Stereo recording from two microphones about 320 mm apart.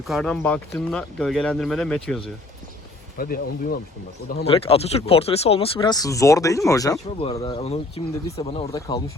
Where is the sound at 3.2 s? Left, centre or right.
Left.